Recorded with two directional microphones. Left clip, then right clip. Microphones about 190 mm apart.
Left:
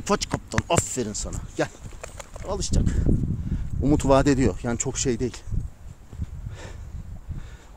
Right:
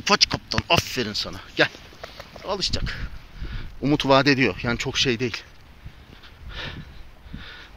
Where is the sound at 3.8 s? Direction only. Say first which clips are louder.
Right 2 dB; 25° left (ahead or behind).